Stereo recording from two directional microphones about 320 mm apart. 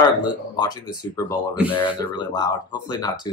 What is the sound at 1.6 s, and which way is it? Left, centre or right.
Speech, centre.